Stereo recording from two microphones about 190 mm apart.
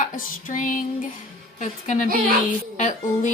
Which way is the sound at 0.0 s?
45° left (ahead or behind).